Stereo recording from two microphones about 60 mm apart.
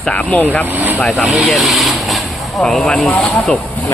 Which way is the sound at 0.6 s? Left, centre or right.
Right.